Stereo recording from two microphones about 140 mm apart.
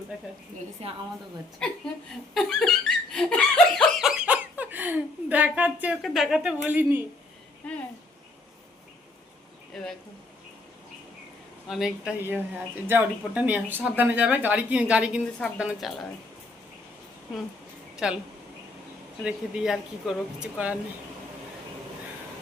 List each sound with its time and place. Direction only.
0.8 s a woman's voice: 50° right (ahead or behind)
2.3 s laughter: centre (ahead or behind)
6.0 s speech: centre (ahead or behind)
7.6 s speech: 10° left (ahead or behind)
9.7 s speech: centre (ahead or behind)
11.7 s speech: 5° right (ahead or behind)
17.9 s a sound: 5° right (ahead or behind)
19.2 s speech: 5° right (ahead or behind)